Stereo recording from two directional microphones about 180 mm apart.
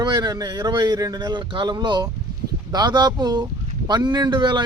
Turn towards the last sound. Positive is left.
turn(degrees=-25)  # may be behind; listen again after turning